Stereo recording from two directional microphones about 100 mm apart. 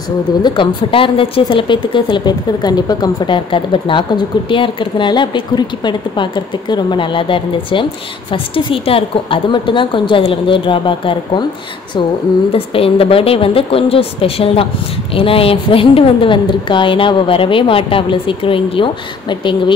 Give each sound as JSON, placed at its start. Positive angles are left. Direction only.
{"t": 0.4, "sound": "a woman's voice", "side_deg": 60}
{"t": 12.5, "sound": "a woman's voice", "side_deg": 65}